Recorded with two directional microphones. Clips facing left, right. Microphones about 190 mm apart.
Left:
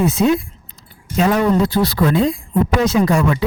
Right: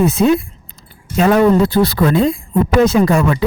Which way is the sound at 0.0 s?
60° right (ahead or behind).